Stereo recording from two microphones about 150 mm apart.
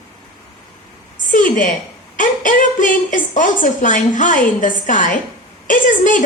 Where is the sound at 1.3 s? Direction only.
60° left (ahead or behind).